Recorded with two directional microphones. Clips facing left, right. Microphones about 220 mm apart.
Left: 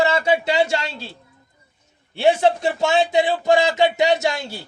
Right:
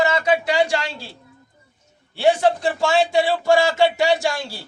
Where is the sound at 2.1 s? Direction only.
20° left (ahead or behind).